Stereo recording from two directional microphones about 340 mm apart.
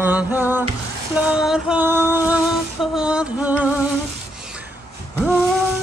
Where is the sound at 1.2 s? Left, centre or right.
Centre.